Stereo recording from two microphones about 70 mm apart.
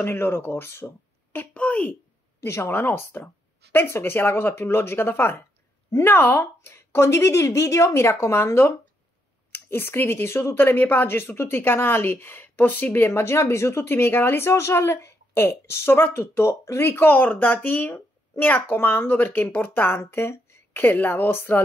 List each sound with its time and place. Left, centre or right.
0.0 s speech: left
1.5 s speech: left
2.4 s speech: left
13.1 s speech: left
20.8 s a woman's voice: left